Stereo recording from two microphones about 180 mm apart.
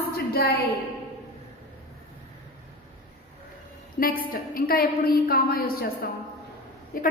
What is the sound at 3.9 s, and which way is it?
A woman's voice, 55° left (ahead or behind).